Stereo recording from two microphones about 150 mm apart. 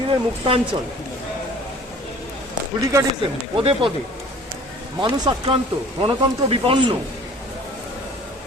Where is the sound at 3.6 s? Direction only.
40° right (ahead or behind).